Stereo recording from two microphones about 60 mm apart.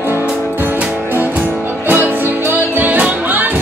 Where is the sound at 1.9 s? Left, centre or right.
Right.